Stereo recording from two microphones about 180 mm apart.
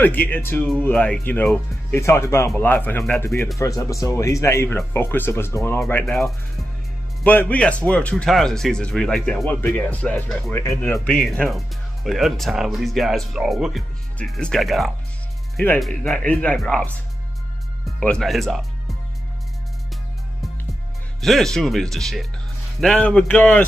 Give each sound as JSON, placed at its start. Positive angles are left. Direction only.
{"t": 0.0, "sound": "speech", "side_deg": 10}
{"t": 7.2, "sound": "speech", "side_deg": 10}
{"t": 21.2, "sound": "speech", "side_deg": 0}